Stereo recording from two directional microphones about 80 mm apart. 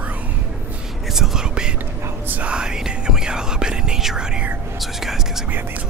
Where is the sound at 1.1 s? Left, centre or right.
Centre.